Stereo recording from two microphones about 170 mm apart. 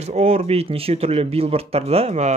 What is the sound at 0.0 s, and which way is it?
Speech, 35° right (ahead or behind).